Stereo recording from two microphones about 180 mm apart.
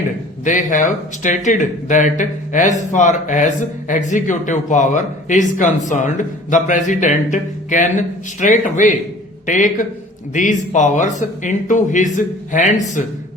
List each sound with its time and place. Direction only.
0.4 s speech: 45° left (ahead or behind)